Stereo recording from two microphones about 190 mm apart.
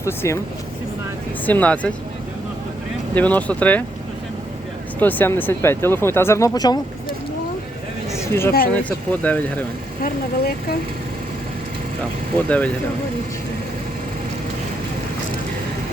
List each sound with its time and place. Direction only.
0.0 s speech: 15° left (ahead or behind)
1.5 s speech: 10° left (ahead or behind)
3.2 s speech: 10° left (ahead or behind)
4.9 s speech: 10° left (ahead or behind)
8.1 s a sound: 15° left (ahead or behind)
8.7 s speech: 5° left (ahead or behind)
10.0 s speech: 55° left (ahead or behind)
12.5 s speech: 10° left (ahead or behind)